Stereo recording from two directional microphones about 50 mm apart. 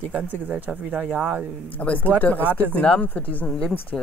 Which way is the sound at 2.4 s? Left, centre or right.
Right.